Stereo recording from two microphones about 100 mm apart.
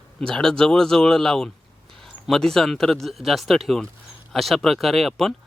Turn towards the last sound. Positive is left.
turn(degrees=0)  # may be behind; listen again after turning